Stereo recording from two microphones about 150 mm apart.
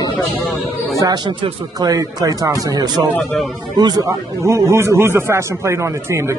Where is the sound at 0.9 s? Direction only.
25° right (ahead or behind).